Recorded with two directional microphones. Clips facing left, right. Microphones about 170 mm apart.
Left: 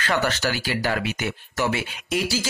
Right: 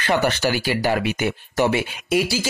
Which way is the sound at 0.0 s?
15° right (ahead or behind).